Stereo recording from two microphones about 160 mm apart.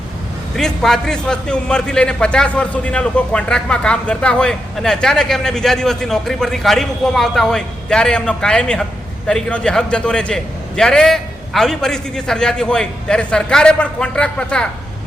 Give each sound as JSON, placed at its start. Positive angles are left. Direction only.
{"t": 0.5, "sound": "a man's voice", "side_deg": 0}